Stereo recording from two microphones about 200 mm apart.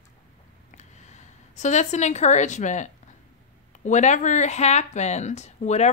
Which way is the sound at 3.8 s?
35° left (ahead or behind).